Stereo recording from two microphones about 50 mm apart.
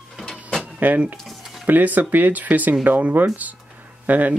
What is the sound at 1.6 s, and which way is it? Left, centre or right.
Speech, right.